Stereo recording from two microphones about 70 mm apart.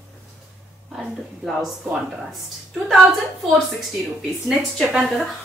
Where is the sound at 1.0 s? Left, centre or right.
Centre.